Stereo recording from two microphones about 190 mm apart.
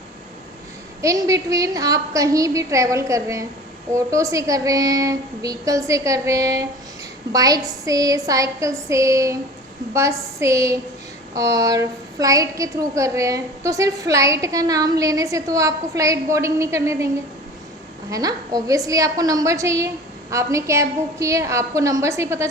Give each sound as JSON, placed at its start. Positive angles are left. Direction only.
{"t": 1.0, "sound": "a woman's voice", "side_deg": -15}
{"t": 18.1, "sound": "a woman's voice", "side_deg": -20}